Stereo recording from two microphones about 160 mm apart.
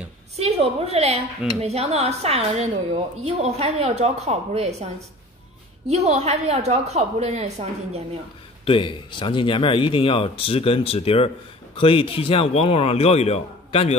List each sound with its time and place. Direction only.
0.4 s a woman's voice: 40° right (ahead or behind)
5.9 s a woman's voice: 40° right (ahead or behind)
8.6 s speech: 30° left (ahead or behind)